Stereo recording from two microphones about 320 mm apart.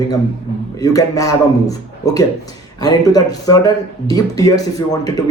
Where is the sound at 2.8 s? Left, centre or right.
Centre.